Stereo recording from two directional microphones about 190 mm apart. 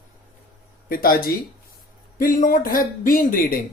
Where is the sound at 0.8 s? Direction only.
50° left (ahead or behind).